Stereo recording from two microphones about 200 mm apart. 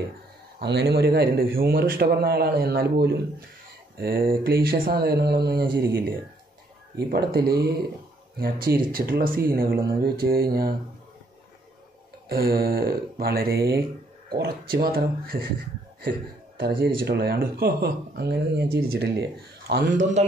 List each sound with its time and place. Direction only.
0.6 s speech: 55° right (ahead or behind)
7.1 s speech: 50° right (ahead or behind)
12.3 s speech: 50° right (ahead or behind)